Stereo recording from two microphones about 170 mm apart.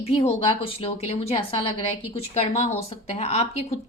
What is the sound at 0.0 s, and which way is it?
Speech, 35° left (ahead or behind).